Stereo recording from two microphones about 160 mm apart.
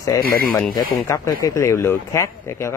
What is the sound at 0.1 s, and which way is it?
A man's voice, 20° left (ahead or behind).